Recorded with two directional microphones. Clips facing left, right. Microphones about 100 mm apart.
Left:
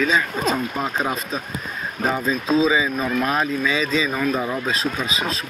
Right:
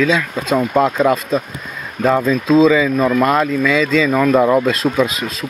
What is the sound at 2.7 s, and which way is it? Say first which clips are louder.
Speech: right 7 dB; 90° right.